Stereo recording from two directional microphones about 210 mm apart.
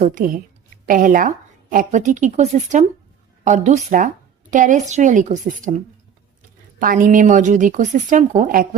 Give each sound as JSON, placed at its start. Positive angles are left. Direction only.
{"t": 0.0, "sound": "a woman's voice", "side_deg": -40}